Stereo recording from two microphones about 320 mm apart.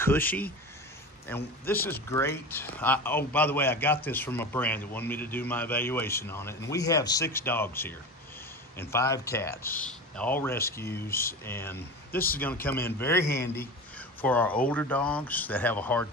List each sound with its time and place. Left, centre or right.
0.0 s speech: centre
12.1 s speech: left
12.4 s speech: centre
13.9 s a sound: centre
14.7 s speech: centre